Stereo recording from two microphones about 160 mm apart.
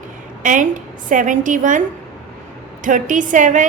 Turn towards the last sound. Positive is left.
turn(degrees=-55)  # may be behind; listen again after turning